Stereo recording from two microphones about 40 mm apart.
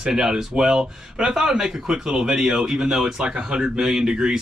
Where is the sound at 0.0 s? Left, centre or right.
Centre.